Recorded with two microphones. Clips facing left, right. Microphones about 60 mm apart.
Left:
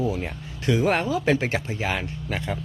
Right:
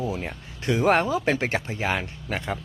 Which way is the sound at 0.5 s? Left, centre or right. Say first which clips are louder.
Left 2 dB; right.